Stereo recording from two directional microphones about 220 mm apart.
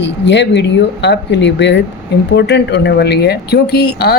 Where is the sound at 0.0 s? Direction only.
50° left (ahead or behind).